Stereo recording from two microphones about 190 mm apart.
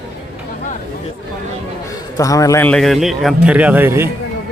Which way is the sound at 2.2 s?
20° left (ahead or behind).